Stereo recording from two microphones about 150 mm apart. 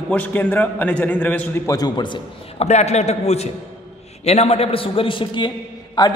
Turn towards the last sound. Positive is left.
turn(degrees=30)  # may be behind; listen again after turning